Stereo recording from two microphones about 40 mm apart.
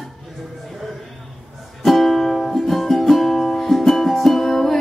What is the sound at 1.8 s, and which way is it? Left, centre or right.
Music, centre.